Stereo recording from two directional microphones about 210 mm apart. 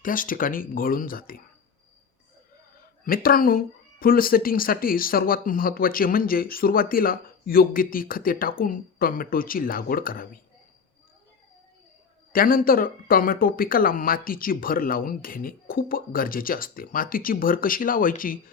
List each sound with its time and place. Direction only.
0.0 s speech: 40° left (ahead or behind)
3.0 s speech: 45° left (ahead or behind)
12.3 s speech: 45° left (ahead or behind)